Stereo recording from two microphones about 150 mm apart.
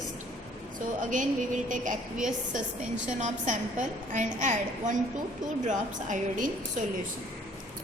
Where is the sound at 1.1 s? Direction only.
60° right (ahead or behind).